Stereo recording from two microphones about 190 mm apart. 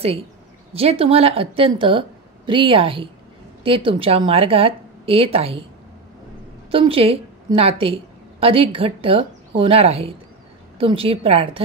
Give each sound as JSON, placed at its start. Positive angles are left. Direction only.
{"t": 0.7, "sound": "a woman's voice", "side_deg": -30}
{"t": 6.7, "sound": "a woman's voice", "side_deg": -30}